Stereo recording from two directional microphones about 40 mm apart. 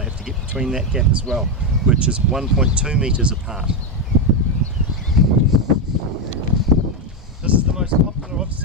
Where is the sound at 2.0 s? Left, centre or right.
Right.